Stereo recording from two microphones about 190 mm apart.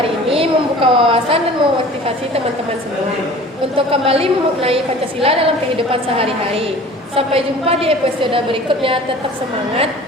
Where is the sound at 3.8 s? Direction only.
30° right (ahead or behind).